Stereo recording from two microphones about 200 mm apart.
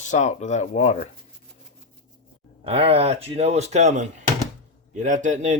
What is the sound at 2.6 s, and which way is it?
Speech, 30° right (ahead or behind).